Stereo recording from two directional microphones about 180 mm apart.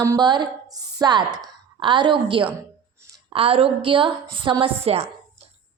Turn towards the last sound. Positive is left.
turn(degrees=-35)  # may be behind; listen again after turning